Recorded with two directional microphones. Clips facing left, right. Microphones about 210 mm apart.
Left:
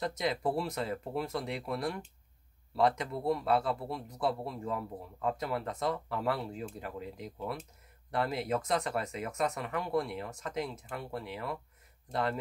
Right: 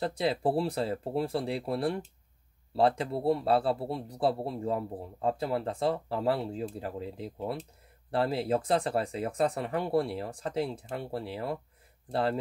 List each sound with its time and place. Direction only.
0.0 s speech: 30° right (ahead or behind)